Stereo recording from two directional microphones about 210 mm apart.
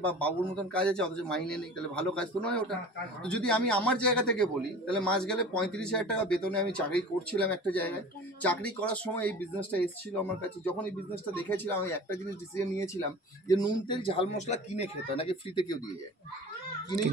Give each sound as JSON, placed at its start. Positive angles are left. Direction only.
{"t": 0.0, "sound": "a man's voice", "side_deg": 5}